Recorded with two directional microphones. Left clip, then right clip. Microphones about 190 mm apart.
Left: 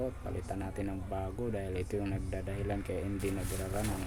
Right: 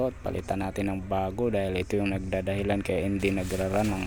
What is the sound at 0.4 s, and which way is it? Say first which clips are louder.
Speech: right 9 dB; 40° right (ahead or behind).